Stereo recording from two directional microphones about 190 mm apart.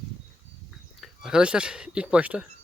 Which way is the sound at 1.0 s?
5° right (ahead or behind).